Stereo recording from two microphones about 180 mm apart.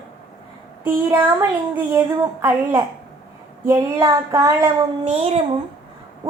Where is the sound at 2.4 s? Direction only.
10° right (ahead or behind).